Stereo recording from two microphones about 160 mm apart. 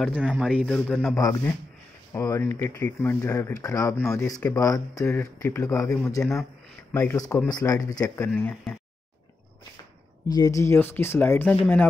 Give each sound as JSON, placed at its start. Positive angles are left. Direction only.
{"t": 0.1, "sound": "a man's voice", "side_deg": -5}
{"t": 0.7, "sound": "speech", "side_deg": 10}
{"t": 1.1, "sound": "speech", "side_deg": 20}
{"t": 6.2, "sound": "speech", "side_deg": 5}
{"t": 8.3, "sound": "speech", "side_deg": 5}
{"t": 10.2, "sound": "speech", "side_deg": 20}